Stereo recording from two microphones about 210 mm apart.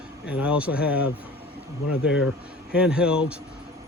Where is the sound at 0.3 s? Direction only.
5° right (ahead or behind).